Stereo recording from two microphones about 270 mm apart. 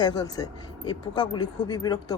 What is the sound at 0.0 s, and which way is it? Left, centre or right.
A man's voice, centre.